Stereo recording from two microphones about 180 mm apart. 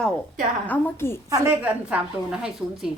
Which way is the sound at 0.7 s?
15° left (ahead or behind).